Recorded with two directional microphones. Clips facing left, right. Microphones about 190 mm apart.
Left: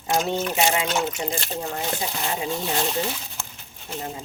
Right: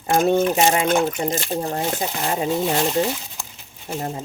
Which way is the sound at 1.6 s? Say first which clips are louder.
Right 5 dB; 35° right (ahead or behind).